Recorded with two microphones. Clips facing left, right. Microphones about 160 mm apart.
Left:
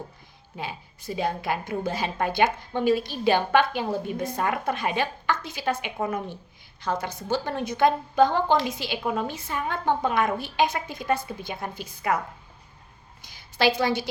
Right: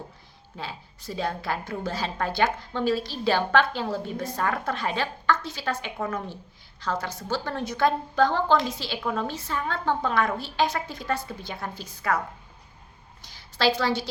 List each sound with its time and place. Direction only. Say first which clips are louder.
0.5 s a woman's voice: left 2 dB; 15° left (ahead or behind)
13.2 s a woman's voice: left 1 dB; 15° left (ahead or behind)